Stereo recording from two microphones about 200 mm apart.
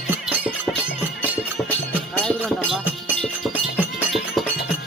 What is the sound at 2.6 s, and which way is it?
Music, 5° right (ahead or behind).